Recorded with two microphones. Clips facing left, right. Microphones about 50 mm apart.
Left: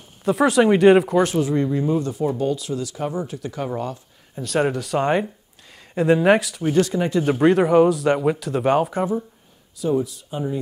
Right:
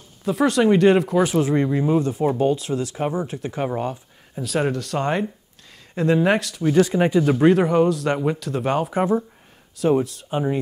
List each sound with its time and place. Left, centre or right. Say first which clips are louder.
0.2 s speech: left 2 dB; centre
1.3 s speech: right 1 dB; right
4.4 s speech: left 1 dB; centre
6.8 s speech: right 3 dB; right
7.4 s speech: left 3 dB; centre
9.8 s speech: right 3 dB; right